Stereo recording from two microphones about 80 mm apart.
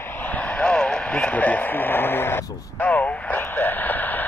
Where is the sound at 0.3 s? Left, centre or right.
Centre.